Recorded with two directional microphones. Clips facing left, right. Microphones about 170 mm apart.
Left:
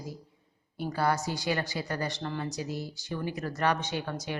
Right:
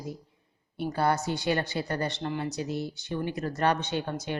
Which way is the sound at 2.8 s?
60° right (ahead or behind).